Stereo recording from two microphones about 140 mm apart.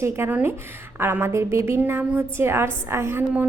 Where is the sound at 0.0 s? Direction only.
20° right (ahead or behind).